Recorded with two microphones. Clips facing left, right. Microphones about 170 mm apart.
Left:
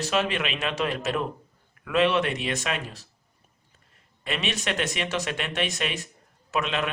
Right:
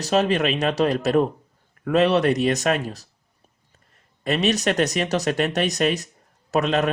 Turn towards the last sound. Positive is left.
turn(degrees=-40)  # may be behind; listen again after turning